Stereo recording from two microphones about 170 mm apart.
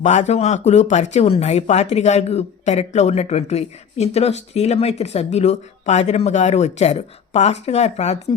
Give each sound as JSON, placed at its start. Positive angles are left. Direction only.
{"t": 0.0, "sound": "speech", "side_deg": 40}